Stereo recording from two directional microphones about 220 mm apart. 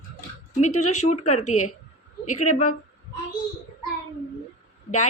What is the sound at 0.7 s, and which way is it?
Speech, 90° left.